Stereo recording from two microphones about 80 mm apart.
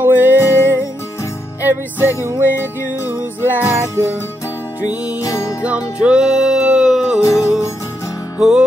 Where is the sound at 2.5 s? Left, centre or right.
Right.